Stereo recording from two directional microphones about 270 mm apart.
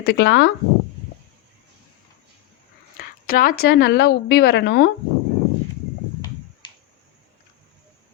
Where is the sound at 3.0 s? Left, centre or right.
Left.